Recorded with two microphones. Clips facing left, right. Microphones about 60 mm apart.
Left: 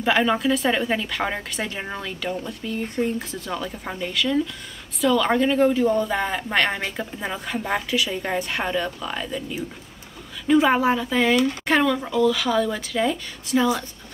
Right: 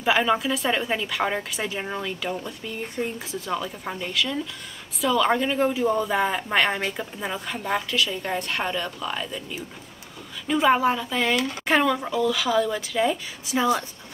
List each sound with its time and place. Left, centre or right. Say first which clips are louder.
0.0 s a woman's voice: left 1 dB; centre
8.1 s a woman's voice: left 2 dB; left
8.4 s a woman's voice: left 2 dB; centre